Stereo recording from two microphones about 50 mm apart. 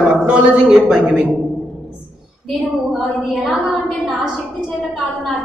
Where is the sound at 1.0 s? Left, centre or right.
Right.